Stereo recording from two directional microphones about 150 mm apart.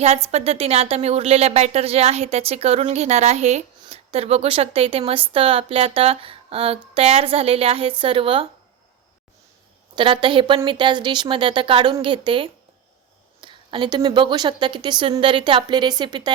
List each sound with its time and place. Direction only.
0.3 s speech: 45° right (ahead or behind)
9.9 s speech: 35° right (ahead or behind)